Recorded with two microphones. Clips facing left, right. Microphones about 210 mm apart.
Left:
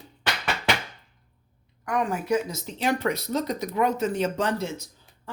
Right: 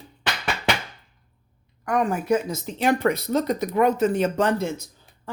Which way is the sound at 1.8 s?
45° right (ahead or behind).